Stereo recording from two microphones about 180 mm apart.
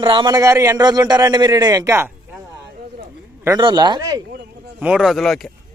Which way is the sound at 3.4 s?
25° right (ahead or behind).